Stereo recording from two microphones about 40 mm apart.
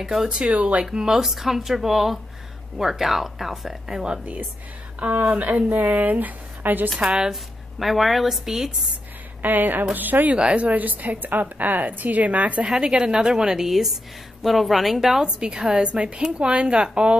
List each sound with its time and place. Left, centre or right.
0.0 s speech: centre
0.4 s speech: right
0.9 s a woman's voice: centre
1.2 s speech: centre
5.0 s a woman's voice: right
7.0 s a woman's voice: centre
7.8 s a woman's voice: centre
9.4 s a woman's voice: right
10.3 s a woman's voice: right
12.6 s a woman's voice: centre
13.7 s a woman's voice: centre
15.2 s a woman's voice: right